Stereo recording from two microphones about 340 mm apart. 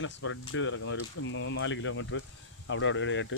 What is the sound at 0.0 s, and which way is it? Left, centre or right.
Speech, left.